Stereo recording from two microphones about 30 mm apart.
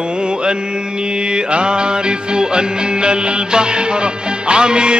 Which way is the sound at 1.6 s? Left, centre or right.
Right.